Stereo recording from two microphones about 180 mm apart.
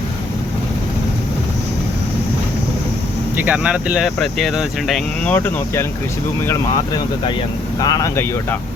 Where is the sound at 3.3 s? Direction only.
10° right (ahead or behind); by 8.5 s 15° left (ahead or behind).